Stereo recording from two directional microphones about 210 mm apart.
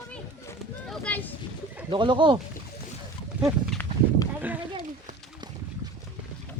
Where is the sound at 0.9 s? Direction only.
5° left (ahead or behind).